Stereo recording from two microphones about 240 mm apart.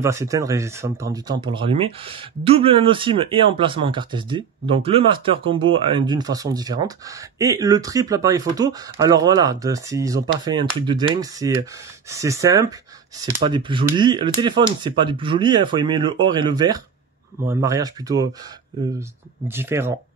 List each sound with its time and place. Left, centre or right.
0.0 s speech: centre